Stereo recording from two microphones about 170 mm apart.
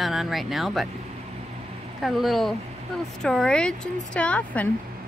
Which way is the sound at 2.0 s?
Centre (ahead or behind).